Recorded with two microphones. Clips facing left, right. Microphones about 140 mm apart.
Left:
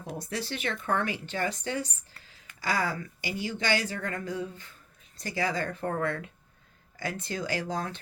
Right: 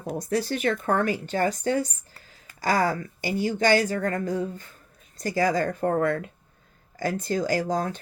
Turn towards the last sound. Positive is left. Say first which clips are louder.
# right 7 dB
turn(degrees=-40)  # may be behind; listen again after turning